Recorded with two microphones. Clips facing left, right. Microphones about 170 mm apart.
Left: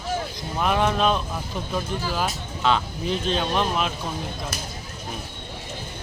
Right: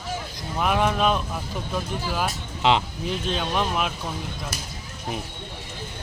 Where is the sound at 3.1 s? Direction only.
5° right (ahead or behind).